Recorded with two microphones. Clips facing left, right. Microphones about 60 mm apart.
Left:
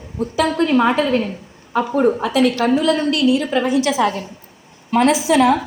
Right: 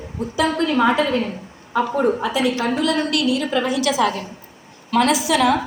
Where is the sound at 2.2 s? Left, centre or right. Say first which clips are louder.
Left 4 dB; left.